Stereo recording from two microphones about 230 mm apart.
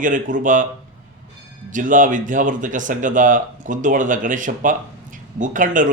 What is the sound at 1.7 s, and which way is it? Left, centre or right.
Speech, right.